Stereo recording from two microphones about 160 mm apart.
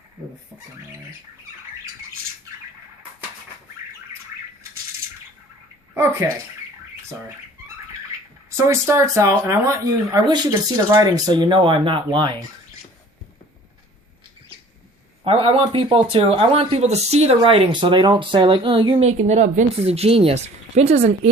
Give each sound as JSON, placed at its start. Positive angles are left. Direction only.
{"t": 8.4, "sound": "speech", "side_deg": -20}
{"t": 15.2, "sound": "speech", "side_deg": -35}